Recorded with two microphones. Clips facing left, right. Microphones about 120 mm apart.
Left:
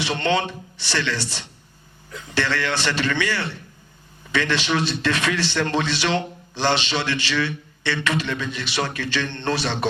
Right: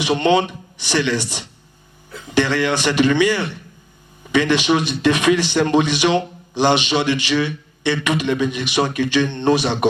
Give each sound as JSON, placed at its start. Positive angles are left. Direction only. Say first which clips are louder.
{"t": 0.0, "sound": "a man's voice", "louder": "right 6 dB", "side_deg": -15}